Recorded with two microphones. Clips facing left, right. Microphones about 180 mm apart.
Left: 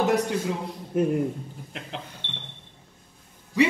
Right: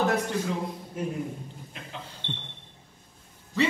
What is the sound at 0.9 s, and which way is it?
Speech, 55° left (ahead or behind).